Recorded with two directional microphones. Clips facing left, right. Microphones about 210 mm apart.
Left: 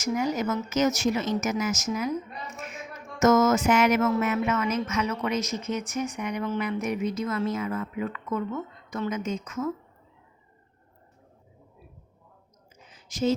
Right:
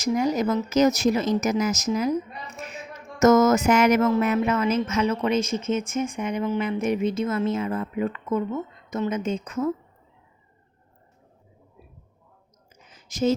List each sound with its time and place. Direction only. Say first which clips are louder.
0.0 s a woman's voice: right 4 dB; 35° right (ahead or behind)
13.1 s speech: right 3 dB; 45° right (ahead or behind)